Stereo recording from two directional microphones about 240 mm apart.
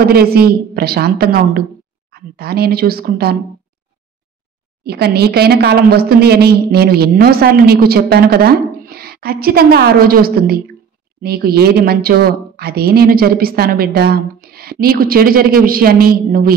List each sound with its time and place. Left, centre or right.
0.0 s a woman's voice: right
4.8 s a woman's voice: right